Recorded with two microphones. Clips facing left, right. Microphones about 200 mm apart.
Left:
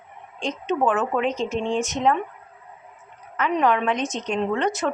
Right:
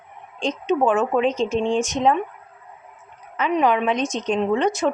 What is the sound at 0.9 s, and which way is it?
Speech, 25° right (ahead or behind).